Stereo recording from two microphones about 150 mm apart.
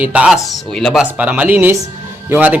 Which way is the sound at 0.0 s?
10° right (ahead or behind).